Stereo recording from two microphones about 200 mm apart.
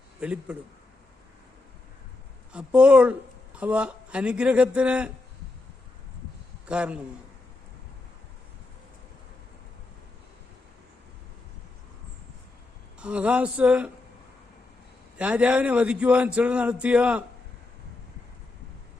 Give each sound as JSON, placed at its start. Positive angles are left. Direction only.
{"t": 0.2, "sound": "speech", "side_deg": -5}
{"t": 2.5, "sound": "speech", "side_deg": -5}
{"t": 6.7, "sound": "speech", "side_deg": -5}
{"t": 13.0, "sound": "speech", "side_deg": -5}
{"t": 15.2, "sound": "speech", "side_deg": -5}